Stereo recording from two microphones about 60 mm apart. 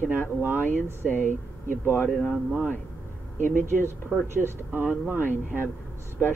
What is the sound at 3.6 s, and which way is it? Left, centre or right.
Speech, right.